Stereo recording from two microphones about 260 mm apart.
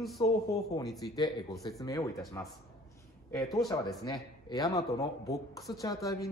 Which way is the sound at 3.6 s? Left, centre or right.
Centre.